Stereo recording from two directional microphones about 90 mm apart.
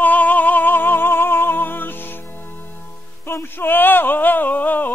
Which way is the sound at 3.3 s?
25° left (ahead or behind).